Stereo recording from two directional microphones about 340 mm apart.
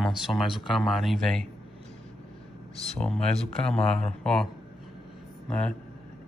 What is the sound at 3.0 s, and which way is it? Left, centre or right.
Speech, centre.